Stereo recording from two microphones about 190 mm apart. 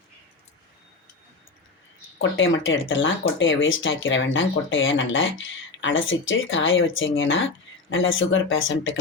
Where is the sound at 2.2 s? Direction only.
90° left.